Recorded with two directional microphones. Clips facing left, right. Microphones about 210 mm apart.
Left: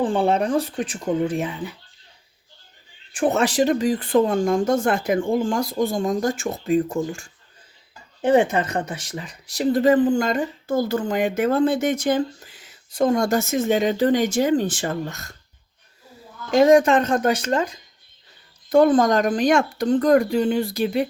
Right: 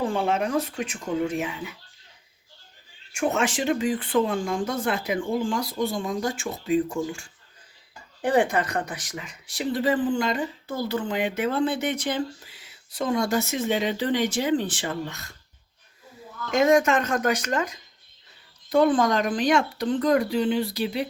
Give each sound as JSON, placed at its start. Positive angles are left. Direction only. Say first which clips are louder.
{"t": 0.0, "sound": "speech", "louder": "left 5 dB", "side_deg": 30}
{"t": 3.1, "sound": "speech", "louder": "left 4 dB", "side_deg": 35}
{"t": 8.2, "sound": "speech", "louder": "left 4 dB", "side_deg": 20}
{"t": 16.5, "sound": "speech", "louder": "left 5 dB", "side_deg": 35}
{"t": 18.7, "sound": "speech", "louder": "left 4 dB", "side_deg": 45}